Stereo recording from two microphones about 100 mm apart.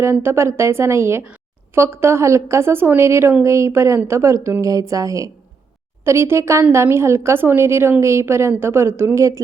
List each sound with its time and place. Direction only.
0.0 s a woman's voice: 25° right (ahead or behind)